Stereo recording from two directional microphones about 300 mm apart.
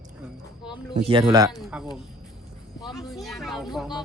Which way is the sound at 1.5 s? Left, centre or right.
Centre.